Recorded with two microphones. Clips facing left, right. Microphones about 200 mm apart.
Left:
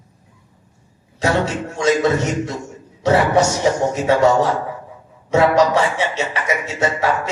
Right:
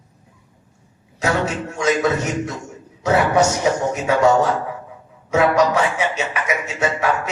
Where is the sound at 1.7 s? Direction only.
30° left (ahead or behind).